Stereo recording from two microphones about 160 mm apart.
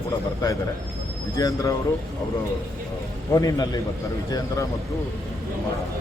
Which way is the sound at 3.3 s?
20° left (ahead or behind).